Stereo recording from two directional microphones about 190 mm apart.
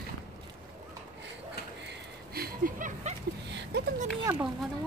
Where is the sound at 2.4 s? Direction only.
45° right (ahead or behind).